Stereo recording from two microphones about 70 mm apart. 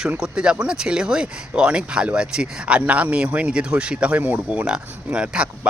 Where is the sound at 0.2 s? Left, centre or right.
Centre.